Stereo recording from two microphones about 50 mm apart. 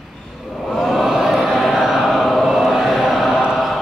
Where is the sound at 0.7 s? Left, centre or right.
Centre.